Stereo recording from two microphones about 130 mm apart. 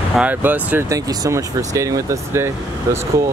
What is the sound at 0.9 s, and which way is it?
Speech, 25° right (ahead or behind).